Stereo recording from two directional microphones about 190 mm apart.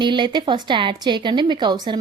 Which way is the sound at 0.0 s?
25° right (ahead or behind).